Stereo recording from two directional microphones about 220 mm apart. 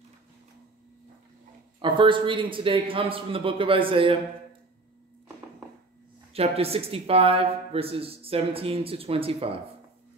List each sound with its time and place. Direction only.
1.8 s speech: 20° right (ahead or behind)
6.3 s speech: 25° right (ahead or behind)